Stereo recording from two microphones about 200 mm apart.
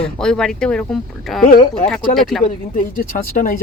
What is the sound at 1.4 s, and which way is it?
Speech, 45° left (ahead or behind).